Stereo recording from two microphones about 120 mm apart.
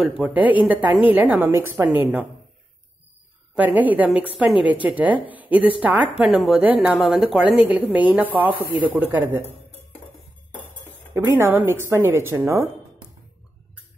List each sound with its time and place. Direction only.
0.1 s a woman's voice: 10° right (ahead or behind)
3.5 s a woman's voice: 15° right (ahead or behind)
11.1 s speech: 20° right (ahead or behind)